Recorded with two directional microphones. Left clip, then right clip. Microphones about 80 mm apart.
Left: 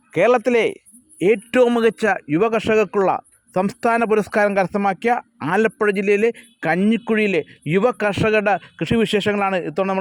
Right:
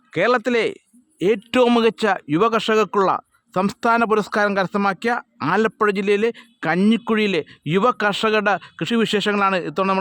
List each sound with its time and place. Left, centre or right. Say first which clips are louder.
0.1 s speech: left 3 dB; centre